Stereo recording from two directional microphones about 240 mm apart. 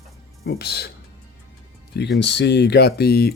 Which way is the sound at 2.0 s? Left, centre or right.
Left.